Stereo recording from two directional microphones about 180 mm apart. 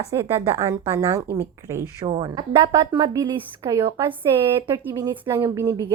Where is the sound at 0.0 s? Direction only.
15° right (ahead or behind).